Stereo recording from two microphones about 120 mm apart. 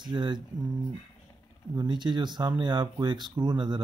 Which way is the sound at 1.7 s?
35° right (ahead or behind).